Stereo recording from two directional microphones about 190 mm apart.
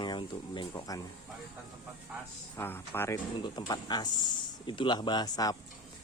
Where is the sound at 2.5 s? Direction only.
10° left (ahead or behind).